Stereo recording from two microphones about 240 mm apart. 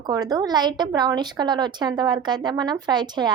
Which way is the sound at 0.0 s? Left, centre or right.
Centre.